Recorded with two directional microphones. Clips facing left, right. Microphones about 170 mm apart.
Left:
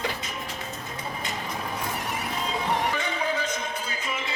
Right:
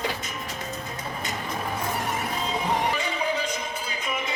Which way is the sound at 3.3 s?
15° right (ahead or behind).